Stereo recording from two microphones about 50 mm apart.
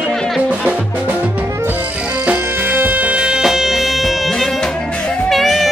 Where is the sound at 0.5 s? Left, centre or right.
Right.